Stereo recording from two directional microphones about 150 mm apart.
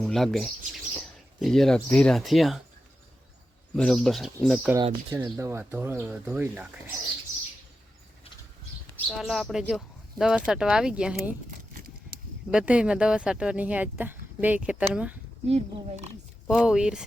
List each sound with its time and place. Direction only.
0.0 s speech: centre (ahead or behind)
3.8 s speech: 5° left (ahead or behind)
5.2 s speech: 20° right (ahead or behind)
9.0 s speech: centre (ahead or behind)
11.7 s a sound: 70° right (ahead or behind)
12.5 s speech: 5° right (ahead or behind)
15.4 s speech: 45° right (ahead or behind)
16.5 s speech: 5° right (ahead or behind)